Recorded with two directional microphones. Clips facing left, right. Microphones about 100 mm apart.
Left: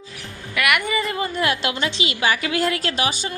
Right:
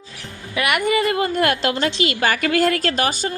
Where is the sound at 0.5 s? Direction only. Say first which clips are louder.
Even; 30° right (ahead or behind).